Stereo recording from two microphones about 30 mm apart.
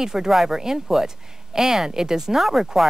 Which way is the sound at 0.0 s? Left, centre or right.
Centre.